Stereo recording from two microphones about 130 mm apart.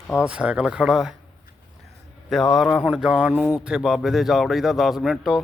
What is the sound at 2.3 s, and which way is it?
A man's voice, centre (ahead or behind).